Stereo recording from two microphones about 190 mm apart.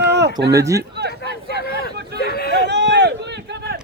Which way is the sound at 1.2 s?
60° right (ahead or behind).